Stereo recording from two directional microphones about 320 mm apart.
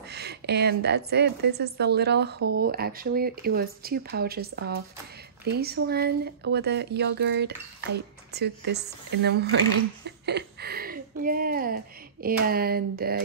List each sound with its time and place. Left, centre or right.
0.1 s speech: right